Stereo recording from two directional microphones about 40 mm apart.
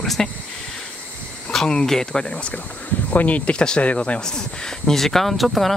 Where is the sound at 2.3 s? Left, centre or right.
Left.